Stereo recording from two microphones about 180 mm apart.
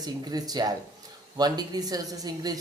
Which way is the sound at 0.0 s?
20° right (ahead or behind).